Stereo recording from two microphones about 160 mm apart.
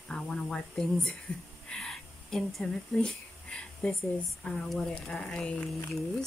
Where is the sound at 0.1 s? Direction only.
5° left (ahead or behind).